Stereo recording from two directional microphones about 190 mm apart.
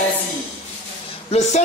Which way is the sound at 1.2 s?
35° left (ahead or behind).